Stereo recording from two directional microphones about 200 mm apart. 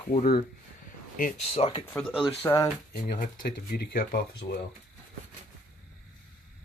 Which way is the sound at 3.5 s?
50° left (ahead or behind).